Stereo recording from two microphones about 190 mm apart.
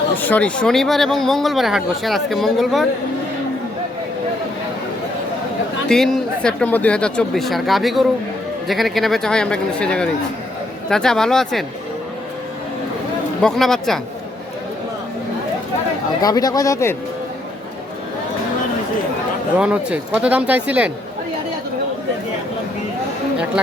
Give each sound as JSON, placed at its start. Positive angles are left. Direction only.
{"t": 0.2, "sound": "speech", "side_deg": 10}
{"t": 5.9, "sound": "speech", "side_deg": 5}
{"t": 13.4, "sound": "speech", "side_deg": 0}
{"t": 16.2, "sound": "speech", "side_deg": 20}
{"t": 19.5, "sound": "speech", "side_deg": -5}